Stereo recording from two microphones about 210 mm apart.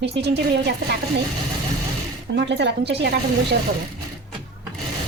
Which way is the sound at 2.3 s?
55° right (ahead or behind).